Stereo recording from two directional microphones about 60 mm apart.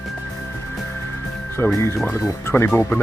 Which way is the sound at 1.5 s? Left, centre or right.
Left.